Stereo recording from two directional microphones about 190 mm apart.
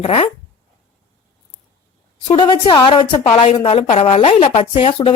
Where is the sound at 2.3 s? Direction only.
25° left (ahead or behind).